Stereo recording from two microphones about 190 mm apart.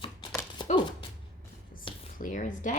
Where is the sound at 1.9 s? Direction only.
25° left (ahead or behind).